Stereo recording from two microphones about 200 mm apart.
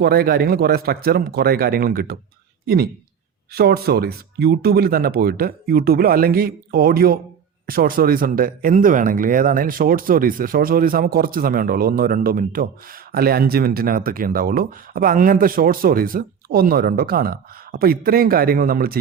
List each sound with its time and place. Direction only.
0.0 s speech: 50° right (ahead or behind)